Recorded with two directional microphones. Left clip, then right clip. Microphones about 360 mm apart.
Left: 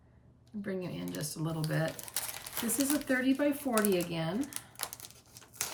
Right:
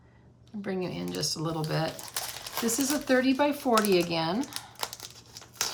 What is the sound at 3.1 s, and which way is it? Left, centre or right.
Speech, centre.